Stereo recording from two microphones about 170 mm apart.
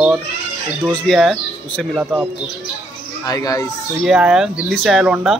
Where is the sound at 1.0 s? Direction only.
Centre (ahead or behind).